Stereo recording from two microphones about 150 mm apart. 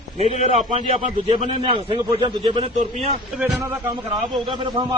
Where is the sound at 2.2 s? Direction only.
30° right (ahead or behind).